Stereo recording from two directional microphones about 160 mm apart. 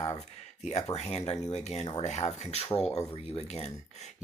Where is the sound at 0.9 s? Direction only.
45° left (ahead or behind).